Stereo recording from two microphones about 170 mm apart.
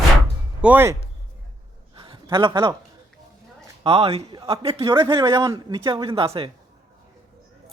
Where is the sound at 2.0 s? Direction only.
30° right (ahead or behind).